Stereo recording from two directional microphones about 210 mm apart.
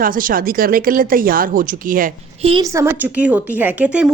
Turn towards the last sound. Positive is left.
turn(degrees=-5)  # may be behind; listen again after turning